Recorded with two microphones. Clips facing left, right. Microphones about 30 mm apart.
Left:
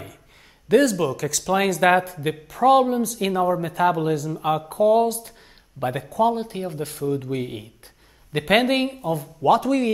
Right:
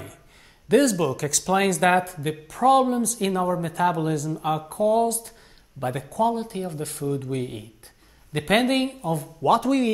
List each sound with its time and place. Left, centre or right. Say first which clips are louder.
0.7 s speech: left 1 dB; centre
8.3 s a woman's voice: left 3 dB; left
8.6 s a woman's voice: left 1 dB; centre
9.0 s speech: left 2 dB; centre